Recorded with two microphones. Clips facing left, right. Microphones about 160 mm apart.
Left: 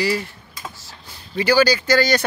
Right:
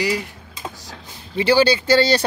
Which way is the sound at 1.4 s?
30° right (ahead or behind).